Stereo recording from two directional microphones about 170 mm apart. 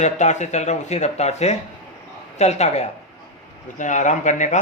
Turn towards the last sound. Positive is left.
turn(degrees=45)  # may be behind; listen again after turning